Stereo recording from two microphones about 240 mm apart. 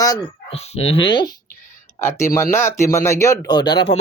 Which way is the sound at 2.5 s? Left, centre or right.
Centre.